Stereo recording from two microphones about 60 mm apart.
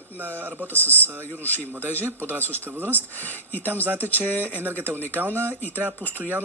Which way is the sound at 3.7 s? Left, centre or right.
Right.